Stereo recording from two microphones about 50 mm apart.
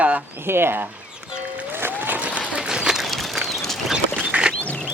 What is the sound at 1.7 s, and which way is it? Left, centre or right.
Music, right.